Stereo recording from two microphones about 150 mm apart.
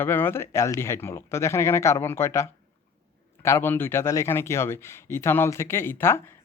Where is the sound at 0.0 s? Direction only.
15° left (ahead or behind).